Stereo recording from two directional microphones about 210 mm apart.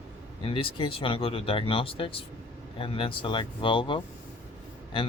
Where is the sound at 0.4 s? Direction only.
25° left (ahead or behind).